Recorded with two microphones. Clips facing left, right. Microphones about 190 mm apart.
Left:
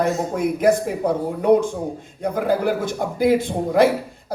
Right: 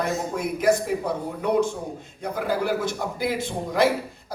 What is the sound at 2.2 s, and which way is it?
Speech, 50° left (ahead or behind).